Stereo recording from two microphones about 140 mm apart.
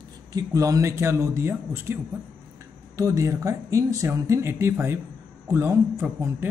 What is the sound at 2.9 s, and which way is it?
A man's voice, 25° right (ahead or behind).